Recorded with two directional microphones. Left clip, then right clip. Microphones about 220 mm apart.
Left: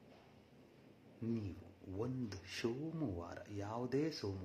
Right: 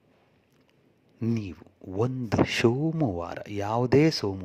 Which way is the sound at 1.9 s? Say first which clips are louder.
Right 19 dB; 40° right (ahead or behind).